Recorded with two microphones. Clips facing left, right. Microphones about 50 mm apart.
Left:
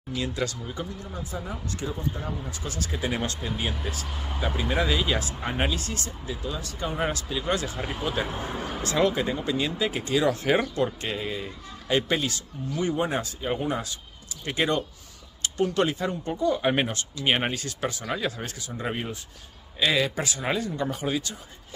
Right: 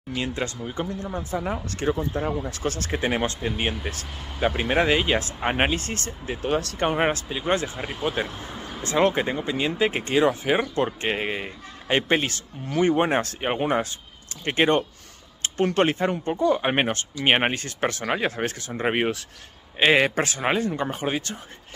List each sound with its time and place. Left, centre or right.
0.1 s speech: right
7.1 s speech: right
8.3 s speech: left
9.0 s speech: right
10.4 s speech: centre
10.7 s speech: right